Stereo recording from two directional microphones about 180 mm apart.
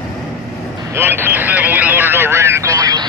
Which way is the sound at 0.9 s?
10° right (ahead or behind).